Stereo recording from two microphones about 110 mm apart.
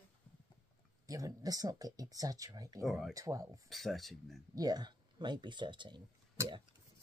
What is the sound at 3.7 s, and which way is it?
Speech, centre (ahead or behind).